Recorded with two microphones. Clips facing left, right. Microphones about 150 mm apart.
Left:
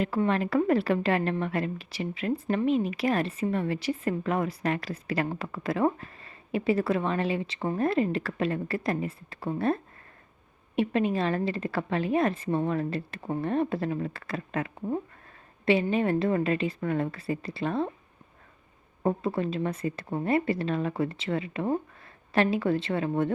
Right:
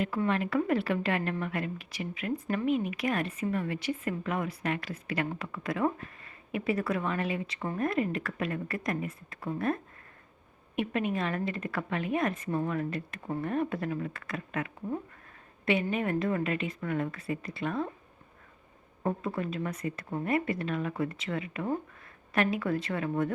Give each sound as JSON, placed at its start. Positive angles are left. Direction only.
{"t": 0.0, "sound": "a woman's voice", "side_deg": 35}
{"t": 19.0, "sound": "a woman's voice", "side_deg": 30}